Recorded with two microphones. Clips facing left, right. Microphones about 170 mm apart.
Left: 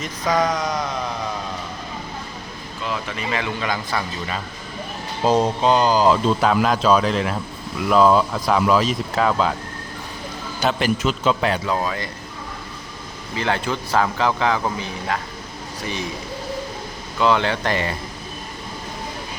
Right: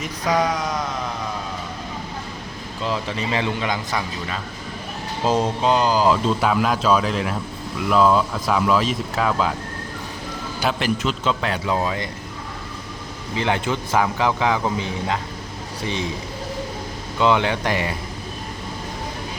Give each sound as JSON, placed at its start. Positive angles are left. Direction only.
{"t": 0.0, "sound": "speech", "side_deg": -10}
{"t": 2.8, "sound": "speech", "side_deg": -30}
{"t": 5.6, "sound": "speech", "side_deg": -5}
{"t": 10.6, "sound": "speech", "side_deg": 0}
{"t": 11.6, "sound": "speech", "side_deg": -15}
{"t": 13.3, "sound": "speech", "side_deg": -20}
{"t": 17.2, "sound": "speech", "side_deg": -15}